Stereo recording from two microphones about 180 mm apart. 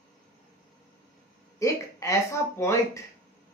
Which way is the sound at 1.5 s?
15° left (ahead or behind).